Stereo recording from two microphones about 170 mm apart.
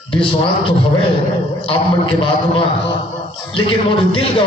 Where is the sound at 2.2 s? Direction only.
30° left (ahead or behind).